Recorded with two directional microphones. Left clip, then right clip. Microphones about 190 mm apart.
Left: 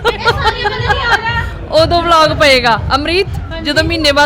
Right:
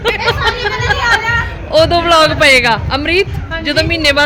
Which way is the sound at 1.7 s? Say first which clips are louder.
Even; centre (ahead or behind).